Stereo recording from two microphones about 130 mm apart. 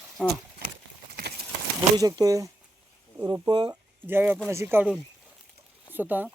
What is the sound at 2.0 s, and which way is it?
Speech, 30° right (ahead or behind).